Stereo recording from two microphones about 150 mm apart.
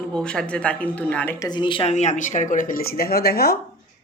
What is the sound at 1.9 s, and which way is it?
A woman's voice, 50° left (ahead or behind).